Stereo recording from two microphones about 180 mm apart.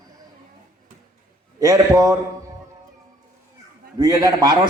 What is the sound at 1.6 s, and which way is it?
Speech, 15° right (ahead or behind).